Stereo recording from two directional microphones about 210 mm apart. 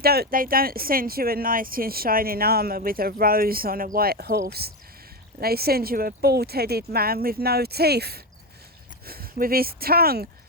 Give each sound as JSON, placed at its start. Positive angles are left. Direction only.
{"t": 0.0, "sound": "speech", "side_deg": -45}